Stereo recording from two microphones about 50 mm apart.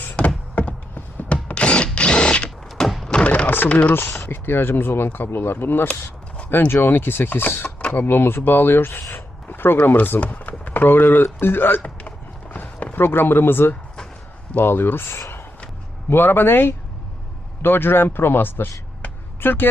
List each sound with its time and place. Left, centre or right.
0.5 s drill: left
2.6 s thunk: centre
3.1 s a sound: left
3.7 s speech: left
4.3 s speech: left
10.2 s a sound: left
10.8 s speech: left
11.8 s a sound: left
12.8 s speech: left